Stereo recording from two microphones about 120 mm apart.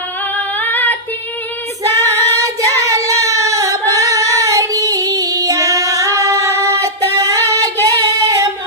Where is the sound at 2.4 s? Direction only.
25° right (ahead or behind).